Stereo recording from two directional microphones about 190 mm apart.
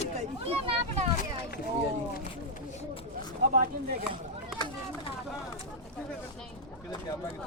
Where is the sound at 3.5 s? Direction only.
50° right (ahead or behind).